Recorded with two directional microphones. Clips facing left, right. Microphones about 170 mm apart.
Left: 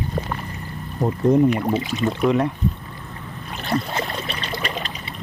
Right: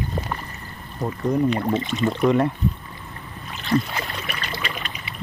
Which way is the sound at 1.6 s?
10° left (ahead or behind).